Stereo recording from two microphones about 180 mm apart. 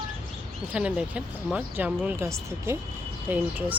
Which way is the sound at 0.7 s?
5° right (ahead or behind).